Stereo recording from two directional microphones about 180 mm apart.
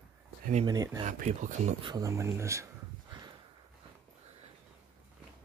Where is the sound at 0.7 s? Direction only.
20° right (ahead or behind).